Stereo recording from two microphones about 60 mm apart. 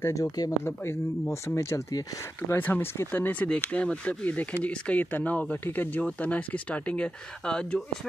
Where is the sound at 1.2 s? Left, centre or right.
Left.